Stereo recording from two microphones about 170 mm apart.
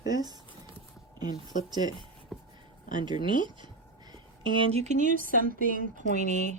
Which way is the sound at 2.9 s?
25° right (ahead or behind).